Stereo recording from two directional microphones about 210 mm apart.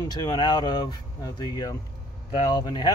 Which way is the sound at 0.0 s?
15° left (ahead or behind).